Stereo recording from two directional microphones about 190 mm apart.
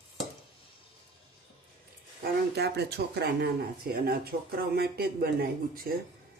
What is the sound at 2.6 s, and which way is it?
Speech, 60° right (ahead or behind).